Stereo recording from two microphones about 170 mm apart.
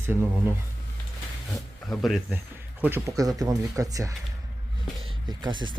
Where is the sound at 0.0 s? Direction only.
10° right (ahead or behind).